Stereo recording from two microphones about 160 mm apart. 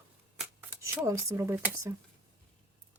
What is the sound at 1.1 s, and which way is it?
Speech, 20° right (ahead or behind).